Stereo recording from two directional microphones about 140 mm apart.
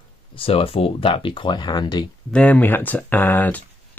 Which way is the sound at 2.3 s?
10° left (ahead or behind).